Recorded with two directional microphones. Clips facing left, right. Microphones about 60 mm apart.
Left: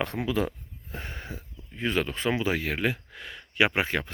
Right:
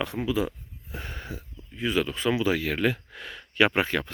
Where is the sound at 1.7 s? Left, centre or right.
Left; by 3.0 s centre.